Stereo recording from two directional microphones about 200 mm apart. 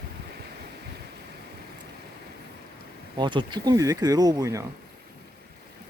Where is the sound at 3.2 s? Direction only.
25° right (ahead or behind).